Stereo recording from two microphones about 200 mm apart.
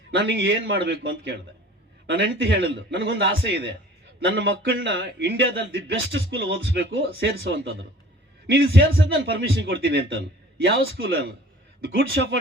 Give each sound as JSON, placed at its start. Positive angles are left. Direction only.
{"t": 0.1, "sound": "a man's voice", "side_deg": -60}